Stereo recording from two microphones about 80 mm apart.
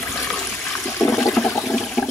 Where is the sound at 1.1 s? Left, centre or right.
Left.